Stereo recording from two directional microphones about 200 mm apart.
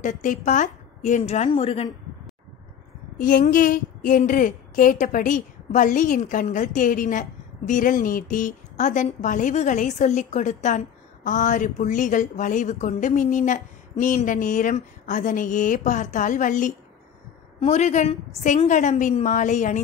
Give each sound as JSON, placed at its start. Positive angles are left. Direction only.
{"t": 0.0, "sound": "a woman's voice", "side_deg": 40}
{"t": 3.2, "sound": "a woman's voice", "side_deg": 40}